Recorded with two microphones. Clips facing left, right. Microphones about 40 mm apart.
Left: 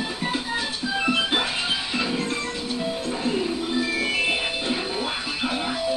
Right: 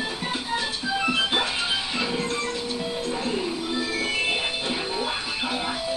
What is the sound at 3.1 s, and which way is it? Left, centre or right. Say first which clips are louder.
Music: left 2 dB; centre.